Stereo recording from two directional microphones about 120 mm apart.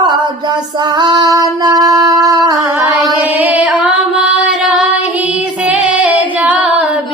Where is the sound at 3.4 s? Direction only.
15° right (ahead or behind).